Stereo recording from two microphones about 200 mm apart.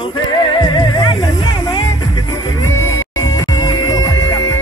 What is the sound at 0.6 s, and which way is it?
Music, 20° left (ahead or behind).